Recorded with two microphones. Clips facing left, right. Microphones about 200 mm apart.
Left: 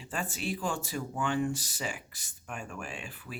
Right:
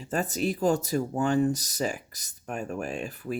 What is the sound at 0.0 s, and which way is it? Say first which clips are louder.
Speech: right 8 dB; 40° right (ahead or behind).